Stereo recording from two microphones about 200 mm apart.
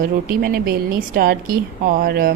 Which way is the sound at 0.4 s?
50° right (ahead or behind).